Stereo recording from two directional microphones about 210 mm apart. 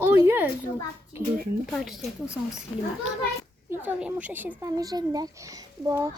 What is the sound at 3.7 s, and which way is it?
Speech, 10° right (ahead or behind).